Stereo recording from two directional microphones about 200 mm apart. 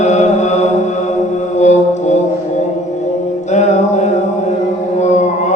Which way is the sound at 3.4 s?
35° left (ahead or behind).